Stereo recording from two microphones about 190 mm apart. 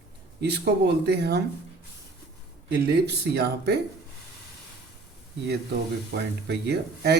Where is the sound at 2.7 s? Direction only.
60° right (ahead or behind).